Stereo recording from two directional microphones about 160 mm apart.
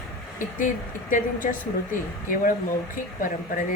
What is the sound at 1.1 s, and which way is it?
Speech, 60° left (ahead or behind).